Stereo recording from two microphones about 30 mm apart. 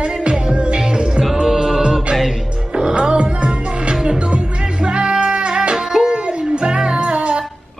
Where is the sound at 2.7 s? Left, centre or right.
Right.